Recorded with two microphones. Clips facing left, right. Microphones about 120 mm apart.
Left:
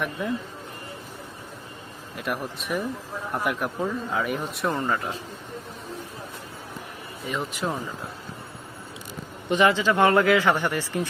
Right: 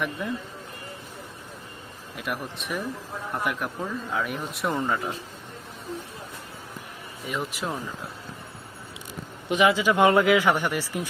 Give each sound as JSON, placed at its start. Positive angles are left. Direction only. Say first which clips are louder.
{"t": 2.1, "sound": "speech", "louder": "left 2 dB", "side_deg": 0}
{"t": 7.3, "sound": "speech", "louder": "left 2 dB", "side_deg": 0}
{"t": 9.5, "sound": "speech", "louder": "even", "side_deg": -5}